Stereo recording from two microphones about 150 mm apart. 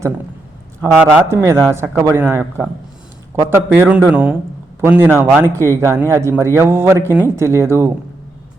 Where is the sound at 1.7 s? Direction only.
20° right (ahead or behind).